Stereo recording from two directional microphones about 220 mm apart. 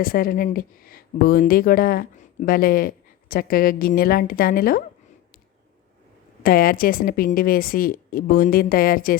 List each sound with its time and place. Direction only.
0.0 s speech: 40° left (ahead or behind)
6.4 s speech: 40° left (ahead or behind)